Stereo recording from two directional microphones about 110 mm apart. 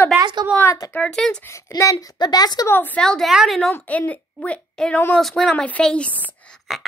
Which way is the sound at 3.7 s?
15° left (ahead or behind).